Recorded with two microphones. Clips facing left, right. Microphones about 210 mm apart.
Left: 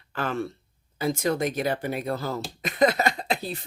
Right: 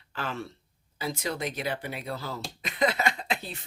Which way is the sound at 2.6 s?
45° left (ahead or behind).